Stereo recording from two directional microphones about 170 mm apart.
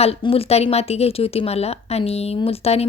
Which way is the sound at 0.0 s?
35° left (ahead or behind).